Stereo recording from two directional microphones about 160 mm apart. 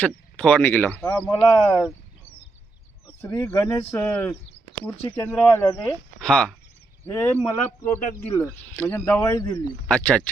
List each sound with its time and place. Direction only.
0.3 s speech: 10° left (ahead or behind)
1.6 s speech: centre (ahead or behind)
3.4 s speech: 10° left (ahead or behind)
5.6 s speech: 25° left (ahead or behind)
6.1 s speech: 5° left (ahead or behind)
7.0 s speech: 15° left (ahead or behind)
9.2 s speech: 25° left (ahead or behind)
9.9 s speech: 5° left (ahead or behind)